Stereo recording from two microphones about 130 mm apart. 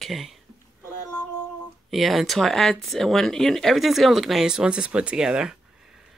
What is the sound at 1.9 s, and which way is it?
Speech, centre (ahead or behind).